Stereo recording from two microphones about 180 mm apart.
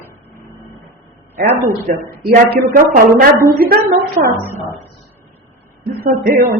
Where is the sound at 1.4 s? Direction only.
55° right (ahead or behind).